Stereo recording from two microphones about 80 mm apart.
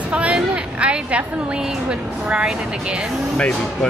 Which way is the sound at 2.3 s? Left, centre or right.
Centre.